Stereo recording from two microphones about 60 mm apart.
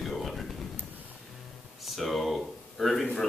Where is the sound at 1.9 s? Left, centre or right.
Centre.